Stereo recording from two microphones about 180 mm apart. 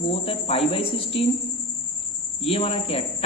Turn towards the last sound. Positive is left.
turn(degrees=30)  # may be behind; listen again after turning